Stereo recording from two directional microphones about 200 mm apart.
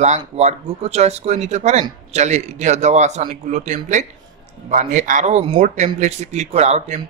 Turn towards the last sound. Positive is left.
turn(degrees=-35)  # may be behind; listen again after turning